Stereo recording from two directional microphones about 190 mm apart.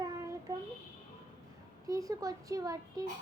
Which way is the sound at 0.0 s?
15° right (ahead or behind).